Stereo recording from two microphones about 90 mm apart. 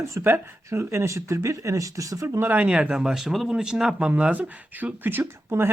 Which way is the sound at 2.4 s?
20° right (ahead or behind).